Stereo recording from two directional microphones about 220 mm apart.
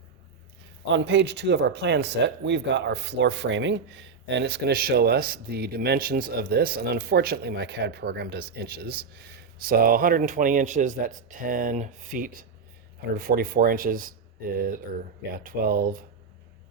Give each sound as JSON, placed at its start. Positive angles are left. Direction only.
{"t": 0.9, "sound": "speech", "side_deg": -55}